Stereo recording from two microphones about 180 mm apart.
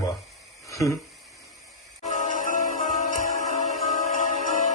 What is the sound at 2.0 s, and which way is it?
Music, 45° left (ahead or behind).